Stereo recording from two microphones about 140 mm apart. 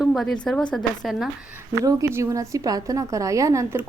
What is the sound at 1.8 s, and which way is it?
A woman's voice, 25° right (ahead or behind).